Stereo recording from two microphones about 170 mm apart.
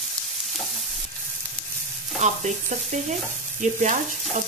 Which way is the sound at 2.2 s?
45° right (ahead or behind).